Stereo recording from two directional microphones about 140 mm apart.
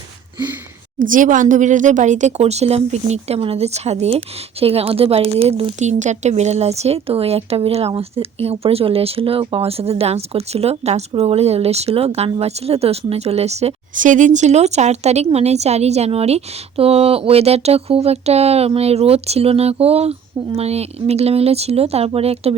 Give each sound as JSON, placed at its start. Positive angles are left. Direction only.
{"t": 0.9, "sound": "speech", "side_deg": -75}